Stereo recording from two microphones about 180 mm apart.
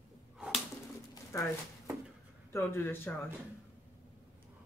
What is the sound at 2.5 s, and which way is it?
Speech, 15° left (ahead or behind).